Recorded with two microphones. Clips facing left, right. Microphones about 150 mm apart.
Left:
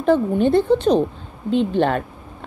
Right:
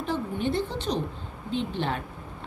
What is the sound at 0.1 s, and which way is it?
Speech, 55° left (ahead or behind).